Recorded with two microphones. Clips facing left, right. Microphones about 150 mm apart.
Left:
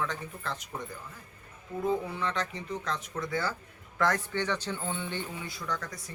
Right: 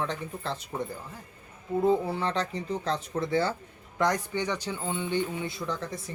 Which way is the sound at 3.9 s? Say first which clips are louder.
Right 2 dB; 15° right (ahead or behind).